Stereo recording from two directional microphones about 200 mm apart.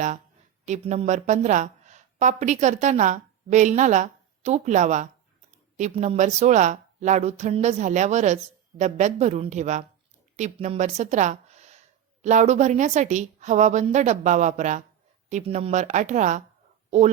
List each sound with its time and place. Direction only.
0.6 s a woman's voice: 35° right (ahead or behind)